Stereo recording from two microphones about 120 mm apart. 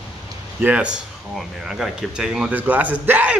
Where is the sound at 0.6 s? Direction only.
10° right (ahead or behind).